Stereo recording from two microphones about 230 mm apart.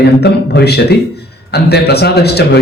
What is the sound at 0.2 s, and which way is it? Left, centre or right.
A man's voice, left.